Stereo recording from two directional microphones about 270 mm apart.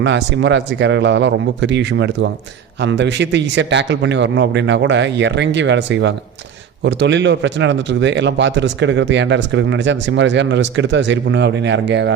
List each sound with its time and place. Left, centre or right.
0.0 s speech: right